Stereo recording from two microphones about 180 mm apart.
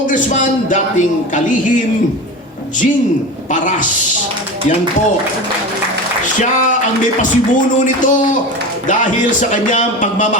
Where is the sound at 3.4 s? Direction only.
45° left (ahead or behind).